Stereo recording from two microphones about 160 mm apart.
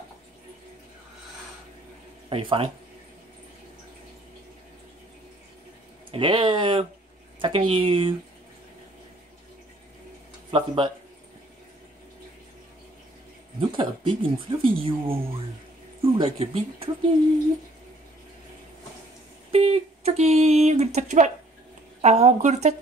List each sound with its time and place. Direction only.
2.2 s speech: 35° right (ahead or behind)
6.1 s speech: 30° right (ahead or behind)
10.5 s speech: 30° right (ahead or behind)
13.6 s speech: 30° right (ahead or behind)
19.5 s speech: 40° right (ahead or behind)